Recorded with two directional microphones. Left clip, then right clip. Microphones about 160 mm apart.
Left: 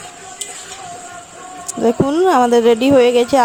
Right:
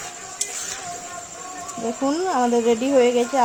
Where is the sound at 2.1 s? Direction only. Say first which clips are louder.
Left 6 dB; 75° left (ahead or behind).